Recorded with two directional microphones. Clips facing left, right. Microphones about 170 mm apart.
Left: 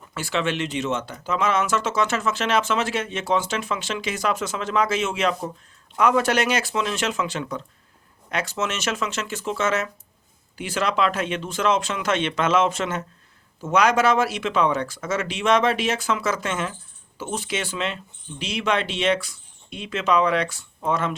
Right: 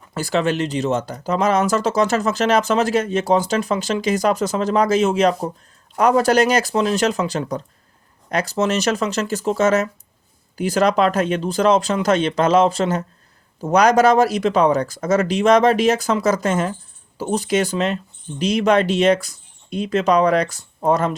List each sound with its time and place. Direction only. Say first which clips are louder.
0.1 s speech: right 5 dB; 40° right (ahead or behind)